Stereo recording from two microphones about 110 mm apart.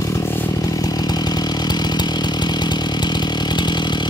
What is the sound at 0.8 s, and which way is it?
Chainsaw, 35° left (ahead or behind).